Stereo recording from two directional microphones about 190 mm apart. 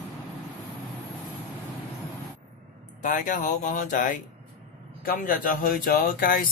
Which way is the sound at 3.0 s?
45° left (ahead or behind).